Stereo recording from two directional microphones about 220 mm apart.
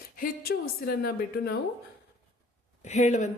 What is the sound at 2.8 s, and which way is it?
Speech, 35° left (ahead or behind).